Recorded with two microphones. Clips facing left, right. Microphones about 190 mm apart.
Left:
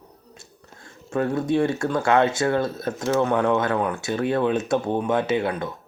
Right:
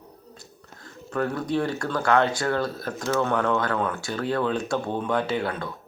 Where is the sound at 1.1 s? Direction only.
25° left (ahead or behind).